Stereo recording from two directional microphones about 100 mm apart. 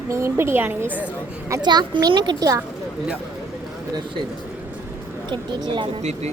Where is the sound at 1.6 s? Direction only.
45° right (ahead or behind).